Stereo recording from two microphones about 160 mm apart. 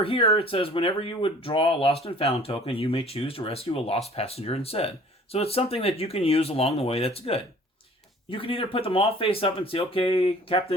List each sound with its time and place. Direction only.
0.0 s speech: 35° left (ahead or behind)